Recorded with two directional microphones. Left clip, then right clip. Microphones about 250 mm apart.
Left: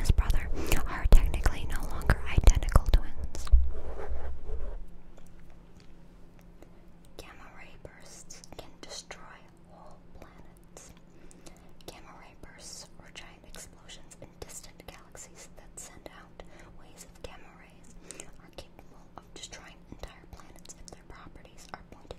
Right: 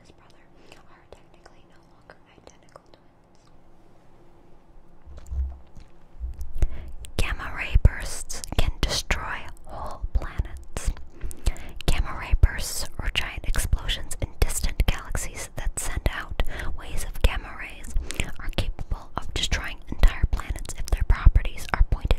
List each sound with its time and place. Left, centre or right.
0.1 s whispering: left
7.2 s whispering: right
15.2 s whispering: right
15.6 s whispering: right